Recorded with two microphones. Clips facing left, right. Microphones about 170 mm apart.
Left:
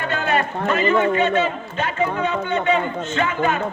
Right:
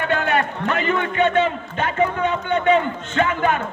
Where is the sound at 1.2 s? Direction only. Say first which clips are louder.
Right 1 dB; 55° right (ahead or behind).